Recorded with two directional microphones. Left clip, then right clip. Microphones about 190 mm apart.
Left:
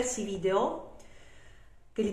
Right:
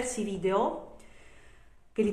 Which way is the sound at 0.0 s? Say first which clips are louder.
Even; 20° right (ahead or behind).